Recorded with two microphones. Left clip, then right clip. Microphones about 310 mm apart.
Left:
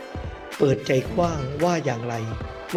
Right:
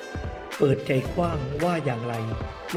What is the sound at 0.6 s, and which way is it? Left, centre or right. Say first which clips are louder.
Speech: left 2 dB; left.